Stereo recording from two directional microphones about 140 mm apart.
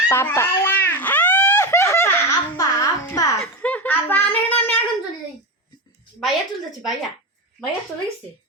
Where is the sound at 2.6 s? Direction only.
20° left (ahead or behind).